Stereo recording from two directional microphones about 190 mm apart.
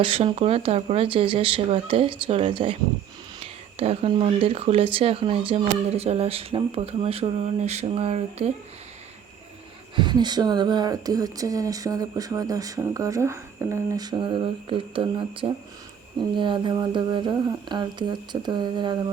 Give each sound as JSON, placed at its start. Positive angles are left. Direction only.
{"t": 0.0, "sound": "speech", "side_deg": -25}
{"t": 9.9, "sound": "speech", "side_deg": -25}